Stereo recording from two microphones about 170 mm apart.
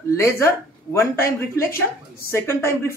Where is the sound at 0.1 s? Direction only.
15° left (ahead or behind).